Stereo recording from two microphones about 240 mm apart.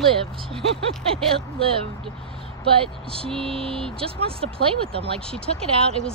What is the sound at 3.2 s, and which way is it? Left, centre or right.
Speech, centre.